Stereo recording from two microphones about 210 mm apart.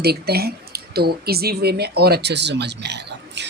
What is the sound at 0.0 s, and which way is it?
Speech, 50° right (ahead or behind).